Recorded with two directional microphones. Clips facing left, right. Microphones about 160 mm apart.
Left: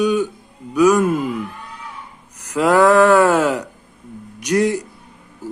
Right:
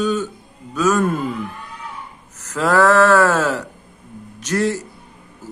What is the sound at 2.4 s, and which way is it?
Speech, 15° left (ahead or behind).